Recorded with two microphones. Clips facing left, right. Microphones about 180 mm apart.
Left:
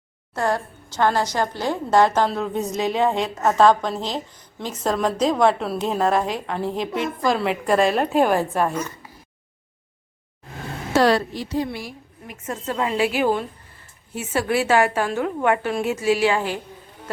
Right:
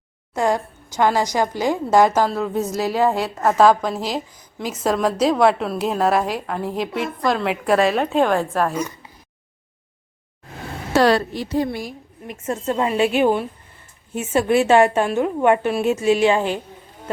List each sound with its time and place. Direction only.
0.3 s a woman's voice: 15° right (ahead or behind); by 8.7 s centre (ahead or behind)
11.0 s a woman's voice: 60° right (ahead or behind); by 11.9 s 45° right (ahead or behind)
12.5 s a woman's voice: 25° right (ahead or behind)